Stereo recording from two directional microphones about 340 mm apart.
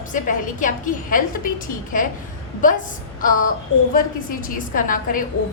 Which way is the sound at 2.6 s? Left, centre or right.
Left.